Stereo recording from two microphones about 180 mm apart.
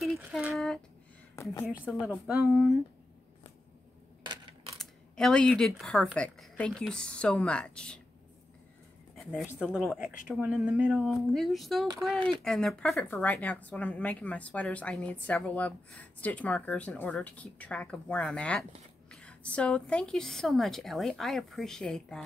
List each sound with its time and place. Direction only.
0.0 s a sound: centre (ahead or behind)
1.3 s a woman's voice: 15° left (ahead or behind)
2.2 s a woman's voice: 5° right (ahead or behind)
4.7 s a woman's voice: 5° left (ahead or behind)
9.1 s a sound: centre (ahead or behind)
9.6 s a woman's voice: 5° left (ahead or behind)
9.9 s a woman's voice: 5° right (ahead or behind)